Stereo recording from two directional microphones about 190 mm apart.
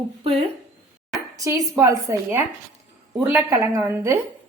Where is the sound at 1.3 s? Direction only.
15° right (ahead or behind).